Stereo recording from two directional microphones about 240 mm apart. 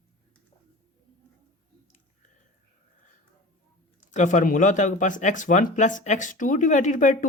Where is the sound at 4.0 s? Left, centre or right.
Left.